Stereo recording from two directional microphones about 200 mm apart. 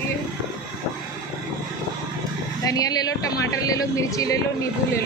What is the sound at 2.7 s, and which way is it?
Speech, 20° left (ahead or behind).